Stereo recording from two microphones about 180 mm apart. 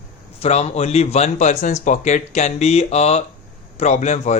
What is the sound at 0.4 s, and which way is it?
Speech, 35° left (ahead or behind).